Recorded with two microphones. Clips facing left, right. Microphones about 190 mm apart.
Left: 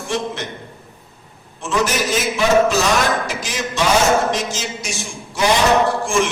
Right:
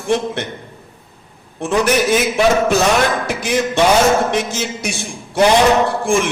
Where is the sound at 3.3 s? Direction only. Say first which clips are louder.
Right 7 dB; 60° right (ahead or behind).